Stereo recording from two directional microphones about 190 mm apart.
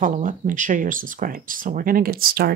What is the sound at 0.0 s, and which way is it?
Speech, 45° right (ahead or behind).